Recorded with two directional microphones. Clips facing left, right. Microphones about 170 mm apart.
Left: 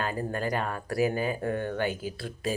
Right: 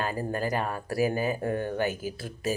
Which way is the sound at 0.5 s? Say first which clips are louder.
Right 1 dB; 10° right (ahead or behind).